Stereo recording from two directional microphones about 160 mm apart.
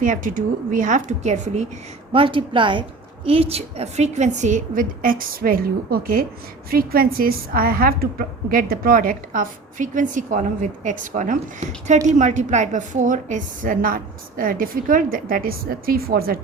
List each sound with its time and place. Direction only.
0.0 s a woman's voice: 55° right (ahead or behind)
2.1 s a woman's voice: 35° right (ahead or behind); by 16.4 s 70° right (ahead or behind)